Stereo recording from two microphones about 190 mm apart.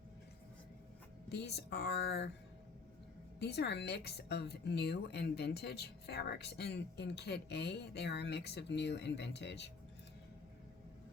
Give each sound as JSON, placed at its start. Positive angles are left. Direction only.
{"t": 1.3, "sound": "speech", "side_deg": 60}
{"t": 3.4, "sound": "speech", "side_deg": 60}